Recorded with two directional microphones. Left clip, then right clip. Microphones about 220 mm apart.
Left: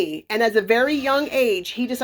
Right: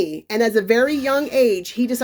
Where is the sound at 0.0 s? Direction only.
35° right (ahead or behind).